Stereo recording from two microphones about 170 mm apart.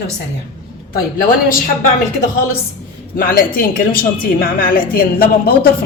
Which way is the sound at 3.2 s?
60° left (ahead or behind).